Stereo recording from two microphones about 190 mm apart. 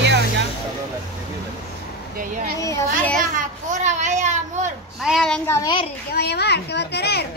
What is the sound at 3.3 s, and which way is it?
A child's voice, 40° right (ahead or behind).